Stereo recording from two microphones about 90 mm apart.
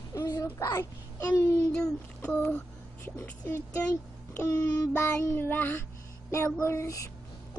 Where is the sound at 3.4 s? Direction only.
30° left (ahead or behind).